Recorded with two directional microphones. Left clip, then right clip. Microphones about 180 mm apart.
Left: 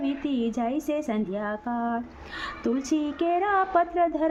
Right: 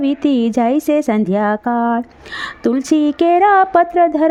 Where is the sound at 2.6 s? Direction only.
40° right (ahead or behind).